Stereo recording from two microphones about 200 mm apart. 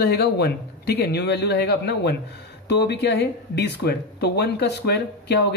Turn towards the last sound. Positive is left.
turn(degrees=55)  # may be behind; listen again after turning